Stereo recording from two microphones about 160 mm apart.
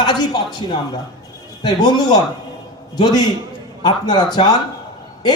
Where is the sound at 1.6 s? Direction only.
25° left (ahead or behind).